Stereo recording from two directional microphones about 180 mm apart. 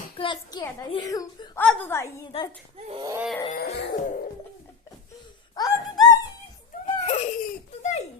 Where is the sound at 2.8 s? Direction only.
30° right (ahead or behind).